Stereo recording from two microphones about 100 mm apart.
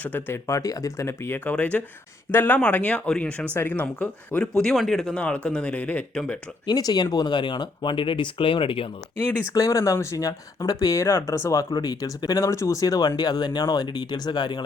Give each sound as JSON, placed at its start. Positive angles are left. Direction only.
{"t": 0.0, "sound": "speech", "side_deg": 20}
{"t": 0.4, "sound": "speech", "side_deg": 35}
{"t": 1.5, "sound": "speech", "side_deg": 15}
{"t": 6.7, "sound": "speech", "side_deg": 45}
{"t": 9.5, "sound": "speech", "side_deg": 35}